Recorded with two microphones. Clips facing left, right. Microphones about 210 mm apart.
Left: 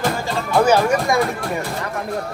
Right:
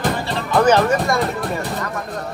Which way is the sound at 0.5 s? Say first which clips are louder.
Right 1 dB; 10° left (ahead or behind).